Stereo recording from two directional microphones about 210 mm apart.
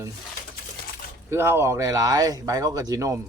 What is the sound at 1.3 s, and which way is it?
Speech, 10° right (ahead or behind).